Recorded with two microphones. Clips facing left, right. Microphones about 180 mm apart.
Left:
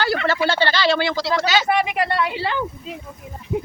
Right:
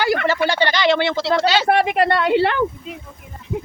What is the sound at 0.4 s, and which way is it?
Speech, 15° right (ahead or behind).